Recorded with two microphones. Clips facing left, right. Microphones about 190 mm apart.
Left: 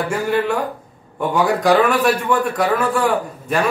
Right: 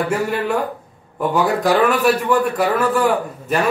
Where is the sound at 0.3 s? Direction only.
Centre (ahead or behind).